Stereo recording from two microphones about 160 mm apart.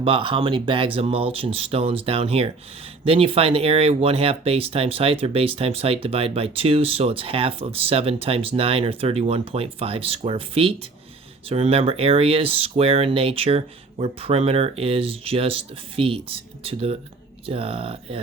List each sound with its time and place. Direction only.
0.0 s speech: 35° right (ahead or behind)